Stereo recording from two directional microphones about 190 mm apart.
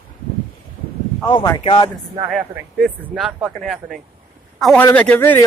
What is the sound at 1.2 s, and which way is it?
Speech, 25° left (ahead or behind).